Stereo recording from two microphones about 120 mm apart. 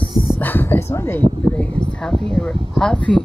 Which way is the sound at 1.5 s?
5° left (ahead or behind).